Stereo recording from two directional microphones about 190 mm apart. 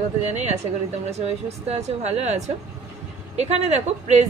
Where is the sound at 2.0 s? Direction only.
35° right (ahead or behind).